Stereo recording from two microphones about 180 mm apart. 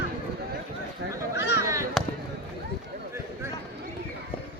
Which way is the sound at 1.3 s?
70° left (ahead or behind).